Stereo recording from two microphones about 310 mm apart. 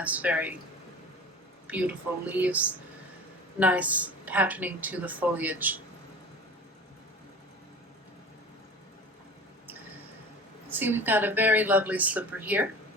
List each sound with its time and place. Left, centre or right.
0.0 s a woman's voice: centre
1.6 s a woman's voice: centre
10.7 s a woman's voice: centre